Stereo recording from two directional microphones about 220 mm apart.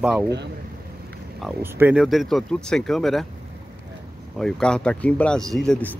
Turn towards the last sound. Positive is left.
turn(degrees=5)  # may be behind; listen again after turning